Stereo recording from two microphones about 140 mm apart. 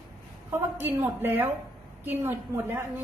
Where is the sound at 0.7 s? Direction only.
15° right (ahead or behind).